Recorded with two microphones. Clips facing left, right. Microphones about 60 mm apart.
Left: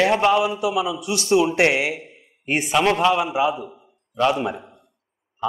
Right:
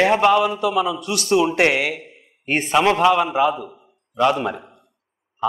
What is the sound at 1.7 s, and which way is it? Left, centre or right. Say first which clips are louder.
Speech: right 1 dB; centre.